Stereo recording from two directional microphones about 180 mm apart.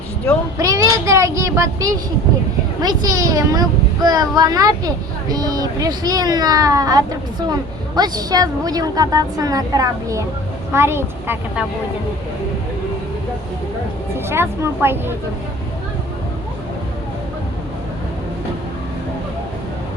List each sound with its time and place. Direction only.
0.6 s a child's voice: 20° right (ahead or behind)
14.3 s a woman's voice: 15° right (ahead or behind)